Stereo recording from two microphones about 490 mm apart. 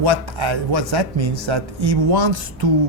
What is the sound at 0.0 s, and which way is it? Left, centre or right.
Speech, right.